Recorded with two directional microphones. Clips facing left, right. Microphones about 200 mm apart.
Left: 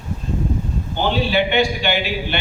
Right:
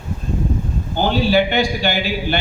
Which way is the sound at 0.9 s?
40° right (ahead or behind).